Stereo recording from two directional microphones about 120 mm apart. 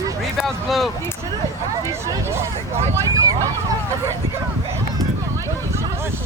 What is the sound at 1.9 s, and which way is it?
Speech, 20° right (ahead or behind).